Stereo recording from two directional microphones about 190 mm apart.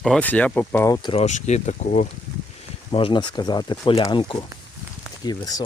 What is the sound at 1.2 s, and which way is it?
Speech, 35° left (ahead or behind).